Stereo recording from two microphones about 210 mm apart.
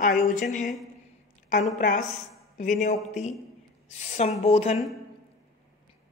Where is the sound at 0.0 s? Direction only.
40° left (ahead or behind).